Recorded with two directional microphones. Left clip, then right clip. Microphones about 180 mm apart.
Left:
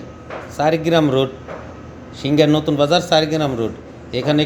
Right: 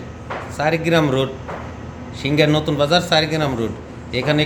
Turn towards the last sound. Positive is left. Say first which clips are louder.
# left 1 dB
turn(degrees=20)  # may be behind; listen again after turning